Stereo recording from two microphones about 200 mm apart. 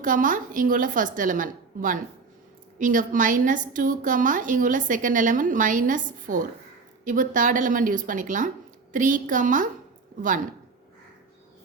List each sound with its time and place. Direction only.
0.0 s a woman's voice: 40° right (ahead or behind)